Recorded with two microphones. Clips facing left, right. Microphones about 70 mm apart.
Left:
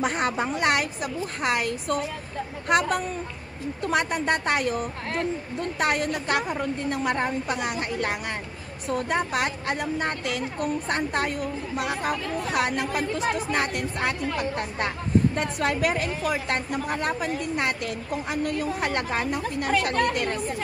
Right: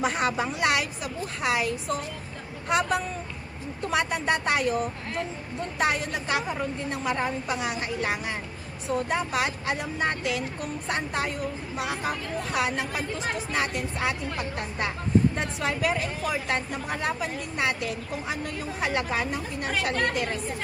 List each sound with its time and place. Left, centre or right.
0.0 s speech: left
3.9 s speech: left
5.8 s speech: left